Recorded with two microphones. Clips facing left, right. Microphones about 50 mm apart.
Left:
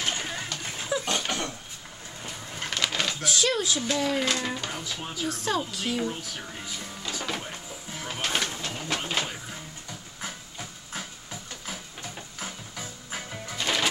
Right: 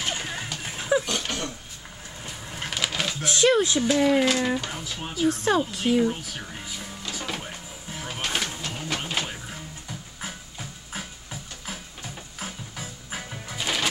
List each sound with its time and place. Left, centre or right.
0.1 s a sound: centre
1.0 s dog: centre
2.2 s a sound: centre
3.3 s speech: right
4.0 s speech: centre
5.3 s a woman's voice: right
5.9 s music: centre